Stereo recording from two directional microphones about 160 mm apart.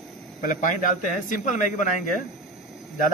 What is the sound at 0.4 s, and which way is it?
A man's voice, 55° left (ahead or behind).